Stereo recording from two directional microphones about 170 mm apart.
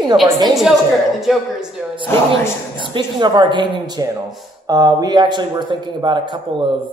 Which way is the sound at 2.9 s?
25° right (ahead or behind).